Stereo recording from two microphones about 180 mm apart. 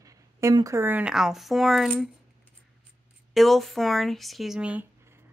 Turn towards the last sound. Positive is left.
turn(degrees=-5)  # may be behind; listen again after turning